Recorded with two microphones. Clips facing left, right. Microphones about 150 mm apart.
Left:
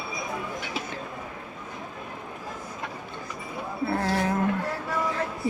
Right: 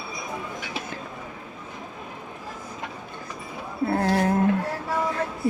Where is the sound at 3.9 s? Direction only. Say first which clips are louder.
Right 4 dB; 50° right (ahead or behind).